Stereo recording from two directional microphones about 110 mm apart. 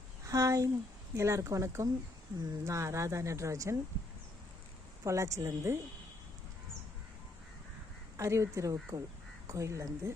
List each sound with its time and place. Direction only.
0.3 s speech: 30° right (ahead or behind)
5.0 s speech: 30° right (ahead or behind)
8.1 s speech: 25° right (ahead or behind)